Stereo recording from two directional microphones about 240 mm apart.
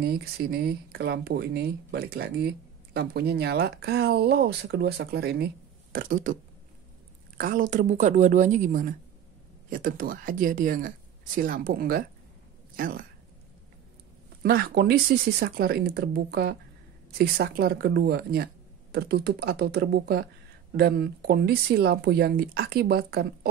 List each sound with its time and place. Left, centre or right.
0.0 s speech: right
7.3 s speech: right
14.4 s speech: right